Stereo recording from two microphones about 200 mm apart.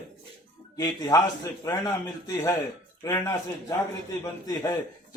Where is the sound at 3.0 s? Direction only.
15° left (ahead or behind).